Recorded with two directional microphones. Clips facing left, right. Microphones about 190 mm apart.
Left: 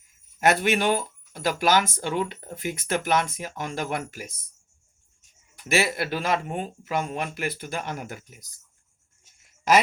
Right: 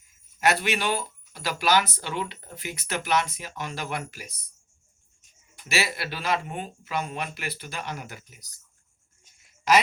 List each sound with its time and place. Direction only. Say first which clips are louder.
0.3 s speech: left 3 dB; 50° left (ahead or behind)
5.6 s speech: left 5 dB; 50° left (ahead or behind)